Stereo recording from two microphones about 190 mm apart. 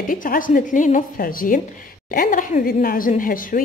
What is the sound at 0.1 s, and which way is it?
A woman's voice, 45° left (ahead or behind).